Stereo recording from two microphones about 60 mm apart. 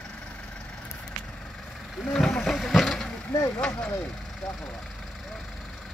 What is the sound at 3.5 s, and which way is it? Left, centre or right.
Speech, centre.